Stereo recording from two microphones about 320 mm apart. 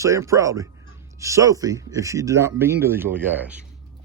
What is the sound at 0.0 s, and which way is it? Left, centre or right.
Speech, centre.